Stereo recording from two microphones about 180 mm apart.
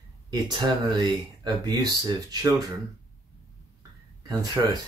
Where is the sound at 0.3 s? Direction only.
25° right (ahead or behind).